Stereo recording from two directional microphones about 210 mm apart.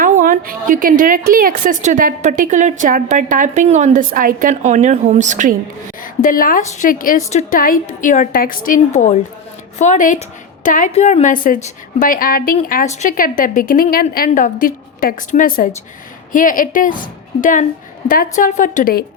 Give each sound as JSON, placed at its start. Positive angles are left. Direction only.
{"t": 0.0, "sound": "a woman's voice", "side_deg": -40}
{"t": 6.0, "sound": "a woman's voice", "side_deg": 40}